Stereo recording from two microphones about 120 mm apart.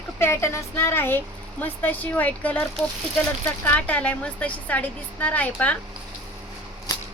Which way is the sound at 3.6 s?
15° left (ahead or behind).